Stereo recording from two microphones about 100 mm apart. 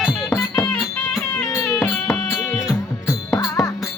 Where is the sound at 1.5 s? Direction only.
25° left (ahead or behind).